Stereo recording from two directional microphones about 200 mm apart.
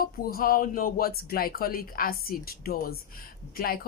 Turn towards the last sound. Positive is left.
turn(degrees=45)  # may be behind; listen again after turning